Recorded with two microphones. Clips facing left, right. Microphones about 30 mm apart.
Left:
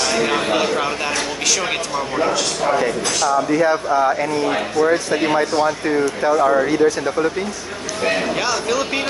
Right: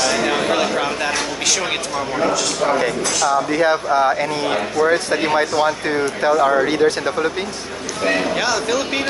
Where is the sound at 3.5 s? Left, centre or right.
Right.